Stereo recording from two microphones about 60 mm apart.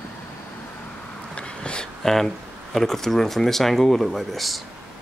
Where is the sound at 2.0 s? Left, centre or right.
Centre.